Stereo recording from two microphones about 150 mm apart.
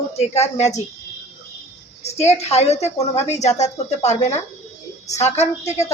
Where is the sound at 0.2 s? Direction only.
45° left (ahead or behind).